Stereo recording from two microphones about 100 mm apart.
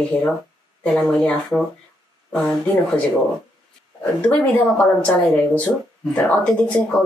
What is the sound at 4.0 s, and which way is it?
Speech, 15° left (ahead or behind).